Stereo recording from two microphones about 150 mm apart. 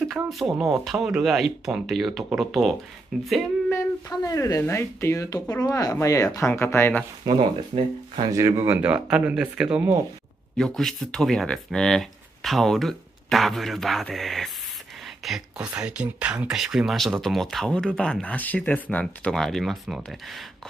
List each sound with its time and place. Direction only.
0.0 s speech: centre (ahead or behind)
3.7 s speech: 25° left (ahead or behind)
7.2 s speech: 30° right (ahead or behind)
8.4 s speech: 20° right (ahead or behind); by 20.4 s centre (ahead or behind)